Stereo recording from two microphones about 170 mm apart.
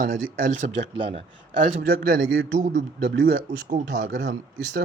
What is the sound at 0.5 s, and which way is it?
Speech, 35° right (ahead or behind).